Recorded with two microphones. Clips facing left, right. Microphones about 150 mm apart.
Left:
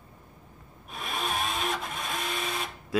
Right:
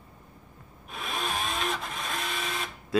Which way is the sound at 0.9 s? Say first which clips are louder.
Even; centre (ahead or behind).